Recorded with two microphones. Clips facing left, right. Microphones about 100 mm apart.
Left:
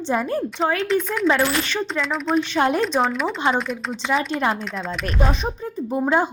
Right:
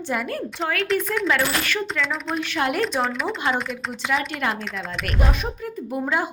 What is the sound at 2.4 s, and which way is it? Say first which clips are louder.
Speech: left 3 dB; 30° left (ahead or behind).